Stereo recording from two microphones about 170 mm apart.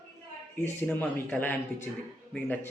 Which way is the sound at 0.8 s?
10° left (ahead or behind).